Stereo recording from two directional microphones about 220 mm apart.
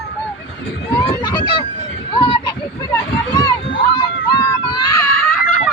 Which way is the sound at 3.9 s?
20° left (ahead or behind).